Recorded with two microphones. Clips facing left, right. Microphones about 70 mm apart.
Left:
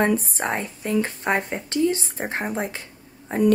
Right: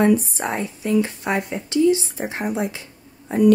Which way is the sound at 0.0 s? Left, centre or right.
Left.